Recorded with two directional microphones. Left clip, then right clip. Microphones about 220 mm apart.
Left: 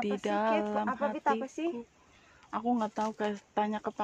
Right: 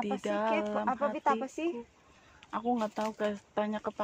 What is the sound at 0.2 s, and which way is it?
Speech, 35° left (ahead or behind).